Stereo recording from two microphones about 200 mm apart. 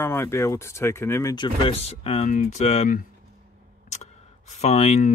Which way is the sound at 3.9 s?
35° left (ahead or behind).